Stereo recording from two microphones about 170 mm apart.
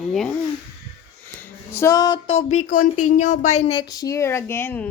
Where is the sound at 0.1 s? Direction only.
Centre (ahead or behind).